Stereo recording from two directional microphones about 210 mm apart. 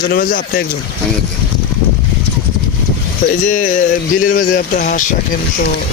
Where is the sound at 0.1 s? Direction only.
45° left (ahead or behind).